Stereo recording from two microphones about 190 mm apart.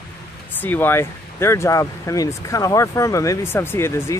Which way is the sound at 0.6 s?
10° left (ahead or behind).